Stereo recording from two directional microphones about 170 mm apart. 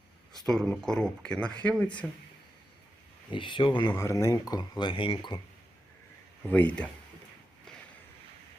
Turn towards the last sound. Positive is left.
turn(degrees=10)  # may be behind; listen again after turning